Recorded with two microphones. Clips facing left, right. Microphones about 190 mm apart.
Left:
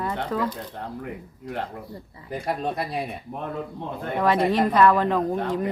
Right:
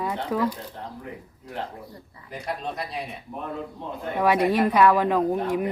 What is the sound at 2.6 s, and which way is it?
Speech, 55° left (ahead or behind).